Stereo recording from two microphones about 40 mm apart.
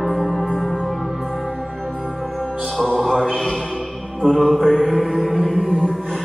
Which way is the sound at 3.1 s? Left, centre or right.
Centre.